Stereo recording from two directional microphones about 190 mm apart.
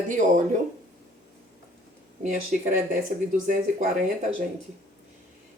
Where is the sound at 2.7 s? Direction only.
45° right (ahead or behind).